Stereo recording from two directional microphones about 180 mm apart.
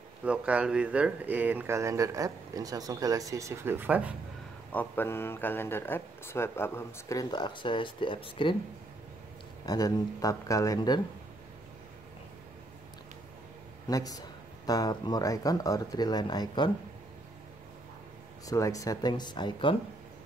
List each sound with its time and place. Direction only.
0.2 s speech: 5° right (ahead or behind)
4.7 s speech: 10° left (ahead or behind); by 8.5 s 30° left (ahead or behind)
9.7 s speech: 20° left (ahead or behind)
13.8 s speech: 20° left (ahead or behind)
18.5 s speech: 20° left (ahead or behind)